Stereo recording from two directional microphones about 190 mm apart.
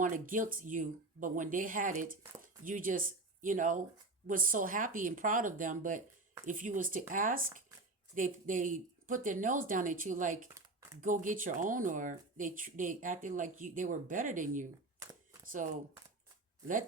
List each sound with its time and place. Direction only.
0.0 s speech: 45° right (ahead or behind)